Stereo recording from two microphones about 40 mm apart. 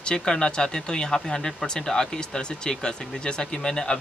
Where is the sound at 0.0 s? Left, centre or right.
Centre.